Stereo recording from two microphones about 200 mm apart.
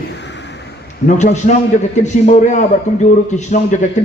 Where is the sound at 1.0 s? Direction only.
35° left (ahead or behind).